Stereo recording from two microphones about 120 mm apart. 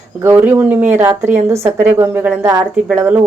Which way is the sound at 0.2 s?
20° right (ahead or behind).